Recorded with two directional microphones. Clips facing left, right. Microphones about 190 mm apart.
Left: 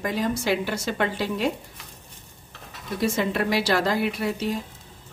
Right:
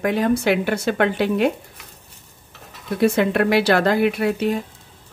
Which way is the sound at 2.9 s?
60° right (ahead or behind).